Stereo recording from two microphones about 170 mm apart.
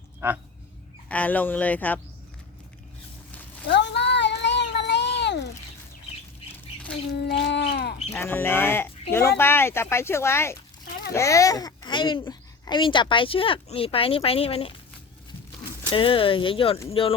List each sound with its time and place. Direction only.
1.0 s speech: 10° left (ahead or behind)
3.7 s cat: 90° left
7.3 s a sound: 90° left; by 7.9 s 75° left (ahead or behind)
8.1 s a child's voice: 15° left (ahead or behind); by 14.7 s 35° left (ahead or behind)
15.9 s speech: 30° left (ahead or behind)